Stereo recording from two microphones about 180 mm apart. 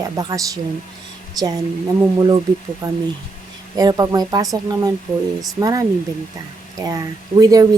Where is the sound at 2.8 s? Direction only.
20° right (ahead or behind).